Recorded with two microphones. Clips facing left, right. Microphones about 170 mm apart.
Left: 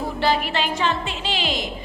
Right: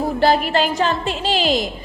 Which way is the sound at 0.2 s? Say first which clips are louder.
Right 5 dB; 45° right (ahead or behind).